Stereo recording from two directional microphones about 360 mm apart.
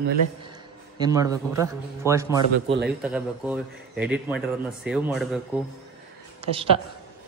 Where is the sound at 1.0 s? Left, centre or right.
Centre.